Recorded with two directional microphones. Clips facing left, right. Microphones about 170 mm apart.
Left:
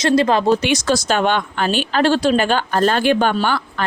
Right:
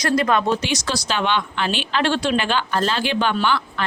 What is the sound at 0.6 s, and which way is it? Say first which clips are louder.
Speech: left 7 dB; 50° left (ahead or behind).